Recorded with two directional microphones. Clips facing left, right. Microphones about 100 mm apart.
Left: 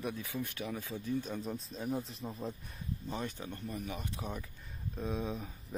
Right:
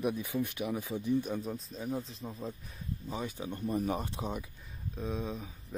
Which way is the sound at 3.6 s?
35° right (ahead or behind).